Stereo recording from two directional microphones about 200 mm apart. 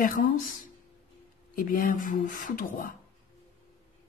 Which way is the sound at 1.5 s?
45° left (ahead or behind).